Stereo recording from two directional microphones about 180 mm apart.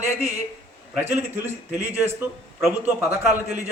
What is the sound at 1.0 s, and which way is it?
A man's voice, 10° right (ahead or behind).